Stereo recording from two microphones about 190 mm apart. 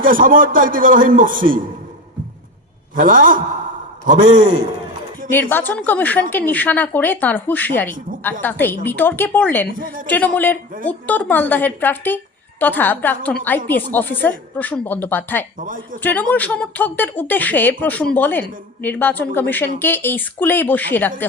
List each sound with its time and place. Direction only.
0.0 s a man's voice: 45° right (ahead or behind)
2.9 s a man's voice: 45° right (ahead or behind)
5.3 s speech: 10° left (ahead or behind)
9.7 s a man's voice: 45° right (ahead or behind)
10.1 s speech: 10° left (ahead or behind)
15.5 s a man's voice: 45° right (ahead or behind)
16.0 s speech: 10° left (ahead or behind)